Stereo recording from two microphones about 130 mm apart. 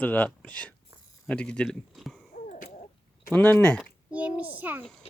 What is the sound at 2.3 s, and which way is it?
Wheeze, 80° left.